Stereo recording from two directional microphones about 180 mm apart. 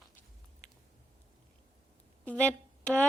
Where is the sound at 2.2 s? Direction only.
5° left (ahead or behind).